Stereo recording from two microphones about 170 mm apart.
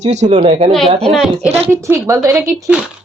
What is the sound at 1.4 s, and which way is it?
Speech, 40° right (ahead or behind).